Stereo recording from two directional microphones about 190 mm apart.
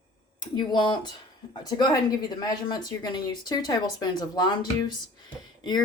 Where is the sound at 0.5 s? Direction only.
25° left (ahead or behind).